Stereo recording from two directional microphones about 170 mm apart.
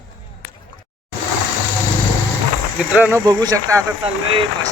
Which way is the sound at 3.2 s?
20° right (ahead or behind).